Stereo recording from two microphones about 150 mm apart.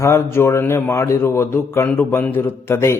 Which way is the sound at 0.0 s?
15° left (ahead or behind).